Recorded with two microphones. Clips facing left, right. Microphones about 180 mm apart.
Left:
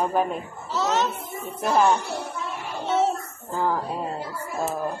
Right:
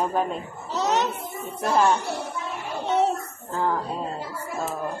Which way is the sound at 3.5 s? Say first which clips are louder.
Even; 5° left (ahead or behind).